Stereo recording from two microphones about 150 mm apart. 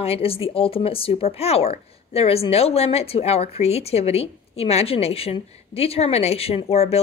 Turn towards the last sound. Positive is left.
turn(degrees=45)  # may be behind; listen again after turning